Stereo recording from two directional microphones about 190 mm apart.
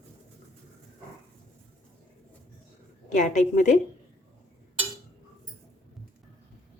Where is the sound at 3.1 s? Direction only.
40° left (ahead or behind).